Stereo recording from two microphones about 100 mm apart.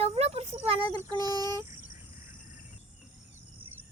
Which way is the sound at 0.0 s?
80° right.